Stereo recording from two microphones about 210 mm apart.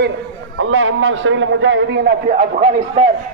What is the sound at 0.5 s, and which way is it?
A man's voice, 70° right (ahead or behind).